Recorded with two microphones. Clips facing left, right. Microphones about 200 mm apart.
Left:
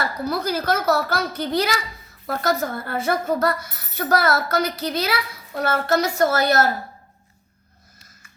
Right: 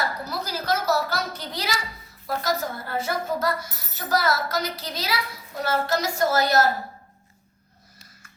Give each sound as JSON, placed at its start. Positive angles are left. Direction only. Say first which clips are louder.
{"t": 0.3, "sound": "speech", "louder": "left 5 dB", "side_deg": 60}